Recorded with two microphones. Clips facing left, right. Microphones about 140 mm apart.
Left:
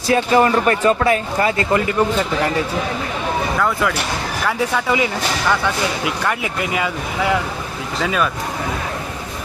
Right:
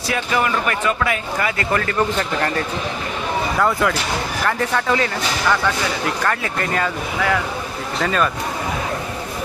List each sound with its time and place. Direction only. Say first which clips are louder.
0.1 s speech: left 6 dB; 35° left (ahead or behind)
1.7 s speech: left 2 dB; 15° left (ahead or behind)
3.6 s speech: right 1 dB; centre (ahead or behind)